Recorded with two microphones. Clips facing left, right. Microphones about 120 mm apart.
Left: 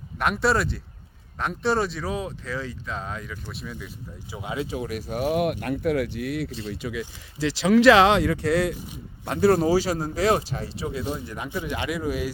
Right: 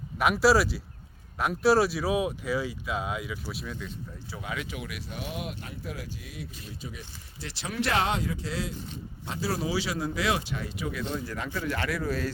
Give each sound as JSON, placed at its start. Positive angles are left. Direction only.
{"t": 0.2, "sound": "speech", "side_deg": -5}
{"t": 4.3, "sound": "speech", "side_deg": 25}
{"t": 6.6, "sound": "speech", "side_deg": 85}
{"t": 11.0, "sound": "speech", "side_deg": 15}